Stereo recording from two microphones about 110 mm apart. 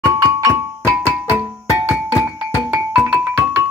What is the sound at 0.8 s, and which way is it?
Music, 15° right (ahead or behind).